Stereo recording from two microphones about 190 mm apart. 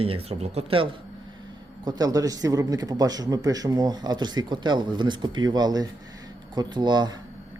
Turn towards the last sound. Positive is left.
turn(degrees=-20)  # may be behind; listen again after turning